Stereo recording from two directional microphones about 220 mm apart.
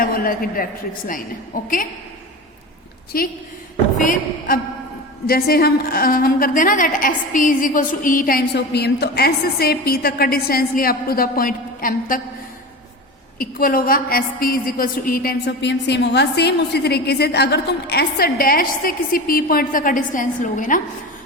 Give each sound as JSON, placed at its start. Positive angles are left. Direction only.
{"t": 0.0, "sound": "a woman's voice", "side_deg": 40}
{"t": 3.1, "sound": "a woman's voice", "side_deg": 40}
{"t": 13.4, "sound": "a woman's voice", "side_deg": 40}